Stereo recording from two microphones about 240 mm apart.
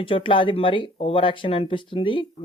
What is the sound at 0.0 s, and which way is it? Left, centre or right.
Speech, left.